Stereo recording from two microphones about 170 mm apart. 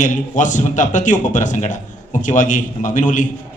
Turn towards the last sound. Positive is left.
turn(degrees=50)  # may be behind; listen again after turning